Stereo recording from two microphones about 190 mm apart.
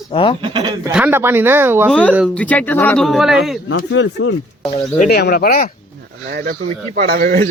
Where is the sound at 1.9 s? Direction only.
5° left (ahead or behind).